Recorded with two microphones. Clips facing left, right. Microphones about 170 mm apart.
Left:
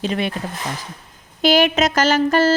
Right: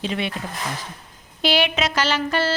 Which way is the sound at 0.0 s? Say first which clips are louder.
Left 4 dB; 45° left (ahead or behind).